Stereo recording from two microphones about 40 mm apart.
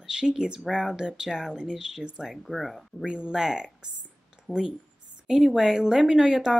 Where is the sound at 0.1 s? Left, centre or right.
Right.